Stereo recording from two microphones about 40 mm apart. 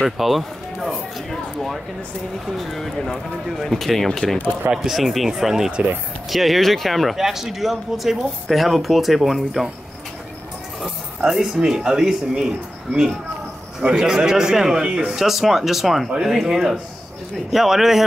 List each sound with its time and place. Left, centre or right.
0.0 s speech: centre
7.2 s speech: centre
11.1 s speech: centre
13.8 s speech: centre
15.0 s speech: centre